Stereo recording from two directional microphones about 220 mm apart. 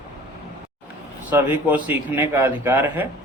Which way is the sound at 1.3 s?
10° right (ahead or behind).